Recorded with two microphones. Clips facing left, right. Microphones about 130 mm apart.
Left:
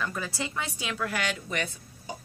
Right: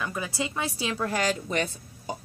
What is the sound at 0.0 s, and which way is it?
A woman's voice, 15° right (ahead or behind).